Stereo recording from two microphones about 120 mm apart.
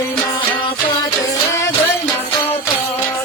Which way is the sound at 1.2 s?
25° left (ahead or behind).